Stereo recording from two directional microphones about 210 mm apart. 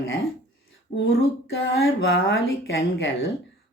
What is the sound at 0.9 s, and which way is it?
Speech, 45° left (ahead or behind).